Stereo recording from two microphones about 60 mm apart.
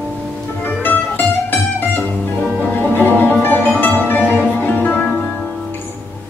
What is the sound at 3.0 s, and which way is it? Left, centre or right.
Music, left.